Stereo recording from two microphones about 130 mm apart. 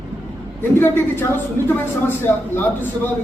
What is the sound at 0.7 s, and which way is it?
A man's voice, 15° left (ahead or behind).